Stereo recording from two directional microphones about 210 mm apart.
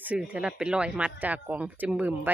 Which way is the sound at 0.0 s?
5° right (ahead or behind).